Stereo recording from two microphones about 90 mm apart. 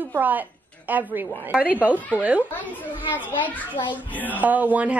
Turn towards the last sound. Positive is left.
turn(degrees=-15)  # may be behind; listen again after turning